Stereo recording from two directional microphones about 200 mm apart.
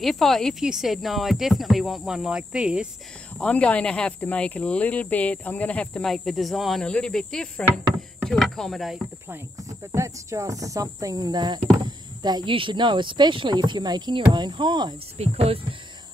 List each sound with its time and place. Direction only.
0.0 s speech: centre (ahead or behind)
3.3 s speech: 5° left (ahead or behind)
9.3 s speech: 15° right (ahead or behind); by 15.6 s 30° right (ahead or behind)